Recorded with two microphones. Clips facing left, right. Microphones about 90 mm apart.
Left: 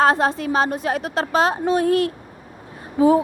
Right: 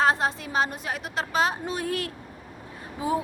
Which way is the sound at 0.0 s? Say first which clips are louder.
Left 6 dB; 50° left (ahead or behind).